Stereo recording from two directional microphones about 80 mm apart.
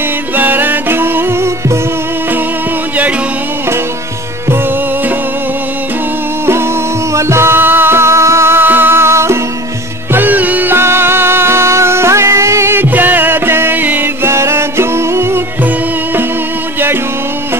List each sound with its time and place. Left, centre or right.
0.4 s music: right
7.2 s music: right
10.1 s music: right
14.2 s music: right